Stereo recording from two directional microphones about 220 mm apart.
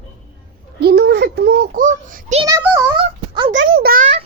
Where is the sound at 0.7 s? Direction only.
45° right (ahead or behind).